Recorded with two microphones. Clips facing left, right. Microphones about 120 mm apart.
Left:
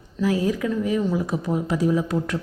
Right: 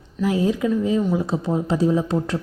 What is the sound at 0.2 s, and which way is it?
Speech, 20° right (ahead or behind).